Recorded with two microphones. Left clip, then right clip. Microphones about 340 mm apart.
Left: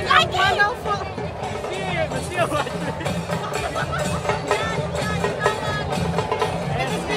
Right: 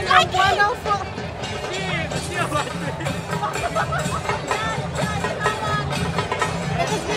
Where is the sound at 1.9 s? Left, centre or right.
Left.